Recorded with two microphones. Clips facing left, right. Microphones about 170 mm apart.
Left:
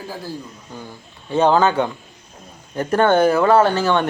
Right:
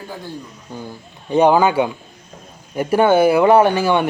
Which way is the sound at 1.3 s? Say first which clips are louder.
Right 2 dB; 15° right (ahead or behind).